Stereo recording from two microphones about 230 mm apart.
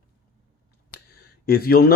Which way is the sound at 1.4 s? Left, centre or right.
Left.